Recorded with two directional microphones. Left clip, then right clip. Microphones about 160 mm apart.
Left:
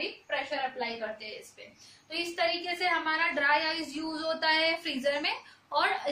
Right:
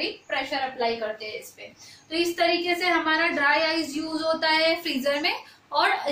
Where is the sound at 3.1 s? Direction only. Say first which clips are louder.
Right 4 dB; 15° left (ahead or behind).